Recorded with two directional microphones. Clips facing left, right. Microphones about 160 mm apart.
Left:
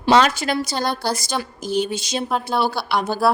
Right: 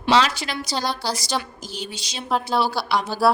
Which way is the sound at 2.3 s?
Centre (ahead or behind).